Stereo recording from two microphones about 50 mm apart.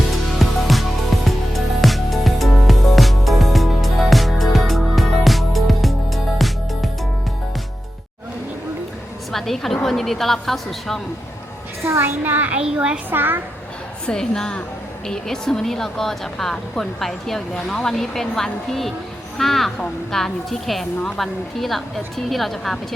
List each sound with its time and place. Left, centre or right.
0.3 s music: centre
9.3 s a woman's voice: centre
11.9 s a child's voice: right
12.2 s a child's voice: right
12.5 s a woman's voice: centre
13.1 s a child's voice: right
14.1 s a woman's voice: centre